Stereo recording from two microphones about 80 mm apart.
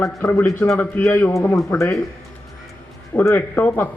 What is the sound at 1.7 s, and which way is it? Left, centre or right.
Speech, left.